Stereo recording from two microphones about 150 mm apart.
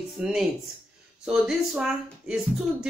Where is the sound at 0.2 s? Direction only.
5° right (ahead or behind).